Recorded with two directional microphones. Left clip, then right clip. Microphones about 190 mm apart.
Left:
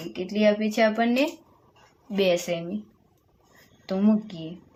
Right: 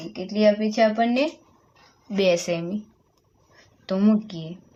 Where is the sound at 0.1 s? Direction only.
5° right (ahead or behind).